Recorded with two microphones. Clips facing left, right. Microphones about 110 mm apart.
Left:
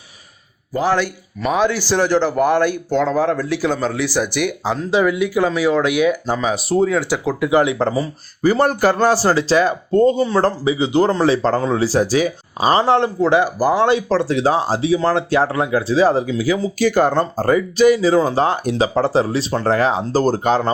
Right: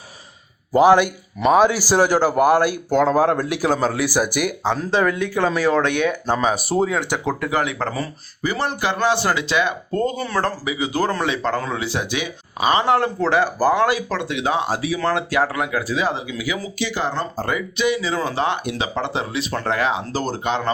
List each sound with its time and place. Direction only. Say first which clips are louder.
0.8 s a man's voice: right 5 dB; 15° right (ahead or behind)
4.6 s speech: left 2 dB; 5° left (ahead or behind)
7.5 s speech: left 10 dB; 30° left (ahead or behind)
8.4 s speech: left 8 dB; 45° left (ahead or behind)
13.1 s speech: left 3 dB; 15° left (ahead or behind)
13.7 s speech: left 4 dB; 30° left (ahead or behind)
16.8 s speech: left 9 dB; 50° left (ahead or behind)